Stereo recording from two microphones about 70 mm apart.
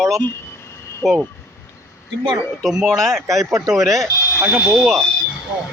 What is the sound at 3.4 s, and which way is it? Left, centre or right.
Speech, right.